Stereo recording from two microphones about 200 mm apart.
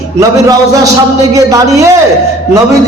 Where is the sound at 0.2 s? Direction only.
15° right (ahead or behind).